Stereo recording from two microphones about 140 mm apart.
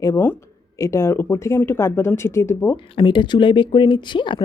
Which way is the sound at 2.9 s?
35° left (ahead or behind).